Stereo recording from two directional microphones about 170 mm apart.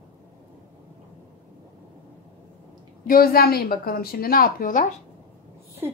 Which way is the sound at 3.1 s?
60° left (ahead or behind).